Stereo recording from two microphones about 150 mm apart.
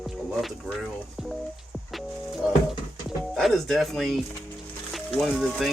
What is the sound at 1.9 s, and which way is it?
Music, centre (ahead or behind).